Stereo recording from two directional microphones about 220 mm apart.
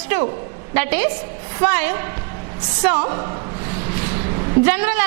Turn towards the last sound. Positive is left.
turn(degrees=-10)  # may be behind; listen again after turning